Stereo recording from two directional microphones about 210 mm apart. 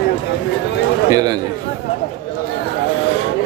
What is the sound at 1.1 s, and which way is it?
Speech, 20° right (ahead or behind).